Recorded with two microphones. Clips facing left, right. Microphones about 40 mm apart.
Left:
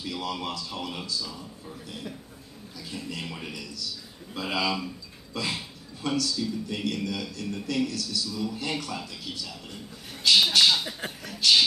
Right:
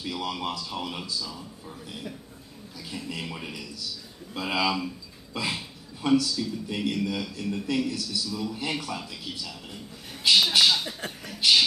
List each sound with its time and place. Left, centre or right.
0.0 s a man's voice: centre
2.9 s a man's voice: centre
5.3 s a sound: centre
6.0 s a man's voice: centre
10.9 s speech: centre